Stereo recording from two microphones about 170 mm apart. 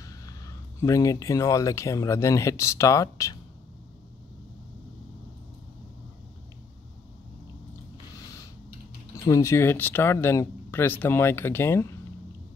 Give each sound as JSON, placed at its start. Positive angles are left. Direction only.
{"t": 0.0, "sound": "speech", "side_deg": 20}
{"t": 9.2, "sound": "speech", "side_deg": 20}